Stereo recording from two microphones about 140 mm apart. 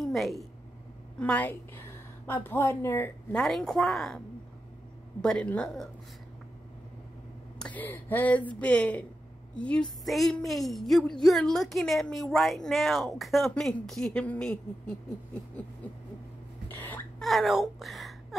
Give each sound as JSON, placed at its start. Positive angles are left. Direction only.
{"t": 0.0, "sound": "a woman's voice", "side_deg": 0}
{"t": 1.2, "sound": "speech", "side_deg": 10}
{"t": 3.3, "sound": "a woman's voice", "side_deg": 0}
{"t": 5.2, "sound": "a woman's voice", "side_deg": 5}
{"t": 7.5, "sound": "a woman's voice", "side_deg": 10}
{"t": 16.6, "sound": "a sound", "side_deg": 15}
{"t": 17.2, "sound": "a woman's voice", "side_deg": 0}